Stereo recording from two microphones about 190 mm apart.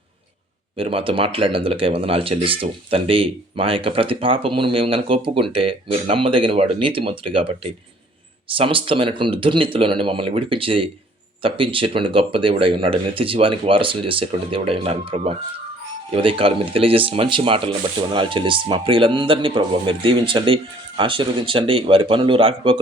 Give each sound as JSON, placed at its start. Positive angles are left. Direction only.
{"t": 0.8, "sound": "speech", "side_deg": -30}